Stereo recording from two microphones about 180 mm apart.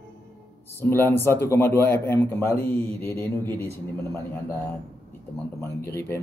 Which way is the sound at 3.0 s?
10° left (ahead or behind).